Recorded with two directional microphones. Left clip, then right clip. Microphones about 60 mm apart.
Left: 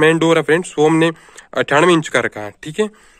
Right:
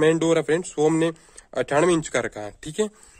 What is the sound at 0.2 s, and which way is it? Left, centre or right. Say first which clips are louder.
Speech: left 7 dB; centre.